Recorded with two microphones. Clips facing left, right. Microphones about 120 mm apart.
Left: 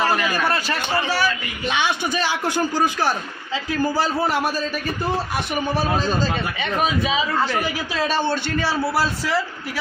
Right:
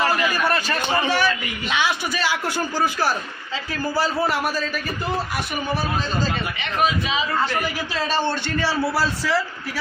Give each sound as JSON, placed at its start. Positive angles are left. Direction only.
{"t": 0.9, "sound": "a man's voice", "side_deg": -15}
{"t": 2.4, "sound": "a man's voice", "side_deg": 20}
{"t": 8.0, "sound": "a man's voice", "side_deg": 5}